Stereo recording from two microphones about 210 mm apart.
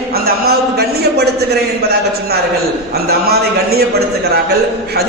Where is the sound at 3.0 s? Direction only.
45° right (ahead or behind).